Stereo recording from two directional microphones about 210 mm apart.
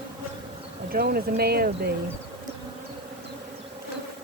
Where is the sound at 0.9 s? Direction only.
45° right (ahead or behind).